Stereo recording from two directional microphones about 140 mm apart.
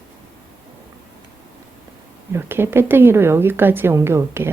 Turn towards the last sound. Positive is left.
turn(degrees=-15)  # may be behind; listen again after turning